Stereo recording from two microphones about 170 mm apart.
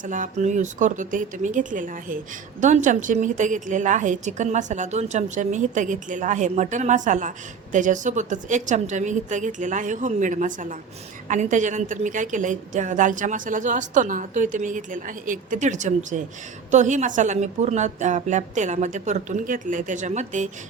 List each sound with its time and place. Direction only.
0.0 s a woman's voice: 50° right (ahead or behind)